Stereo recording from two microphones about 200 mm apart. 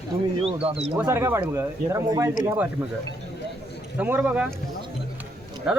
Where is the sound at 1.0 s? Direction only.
10° right (ahead or behind).